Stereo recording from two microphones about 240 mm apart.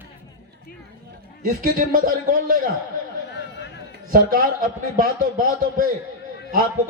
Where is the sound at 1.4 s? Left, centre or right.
Right.